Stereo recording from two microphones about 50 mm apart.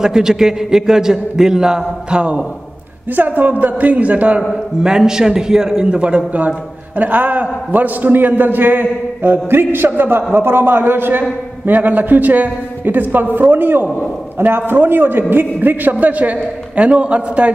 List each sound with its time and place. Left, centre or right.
0.0 s a man's voice: centre
3.2 s a man's voice: right
4.4 s a man's voice: centre; by 17.5 s right